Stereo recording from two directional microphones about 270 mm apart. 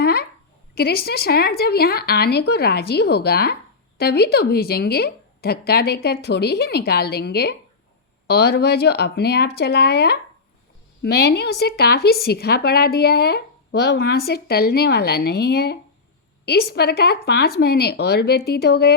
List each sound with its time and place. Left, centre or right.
0.0 s a sound: left
0.8 s speech: left
11.2 s speech: left